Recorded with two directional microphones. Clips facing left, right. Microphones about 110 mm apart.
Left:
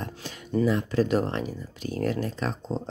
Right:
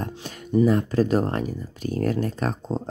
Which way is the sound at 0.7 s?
45° right (ahead or behind).